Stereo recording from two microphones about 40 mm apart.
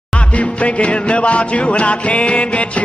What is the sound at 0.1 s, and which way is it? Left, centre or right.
Music, left.